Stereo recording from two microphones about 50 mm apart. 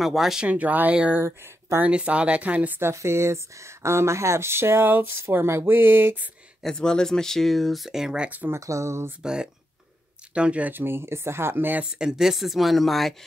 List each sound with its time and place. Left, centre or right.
0.0 s speech: centre
0.4 s speech: right
1.2 s speech: right
1.9 s speech: right
2.9 s speech: right
6.6 s speech: centre
8.5 s speech: right
9.2 s speech: centre
10.7 s speech: right
11.8 s speech: centre